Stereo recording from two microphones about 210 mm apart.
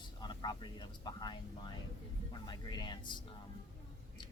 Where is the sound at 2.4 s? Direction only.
20° left (ahead or behind).